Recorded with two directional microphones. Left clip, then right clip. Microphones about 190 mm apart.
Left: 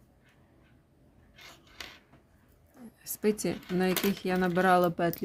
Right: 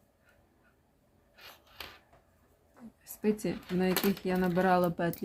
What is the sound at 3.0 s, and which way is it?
A woman's voice, 25° left (ahead or behind).